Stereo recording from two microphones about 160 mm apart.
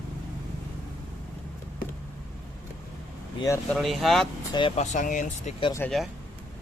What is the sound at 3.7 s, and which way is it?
Speech, centre (ahead or behind).